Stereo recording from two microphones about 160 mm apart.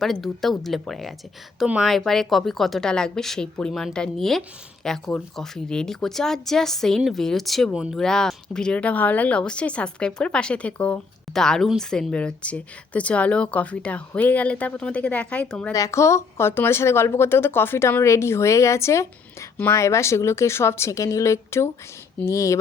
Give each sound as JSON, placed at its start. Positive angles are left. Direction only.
{"t": 0.0, "sound": "a woman's voice", "side_deg": 0}
{"t": 15.7, "sound": "a woman's voice", "side_deg": 20}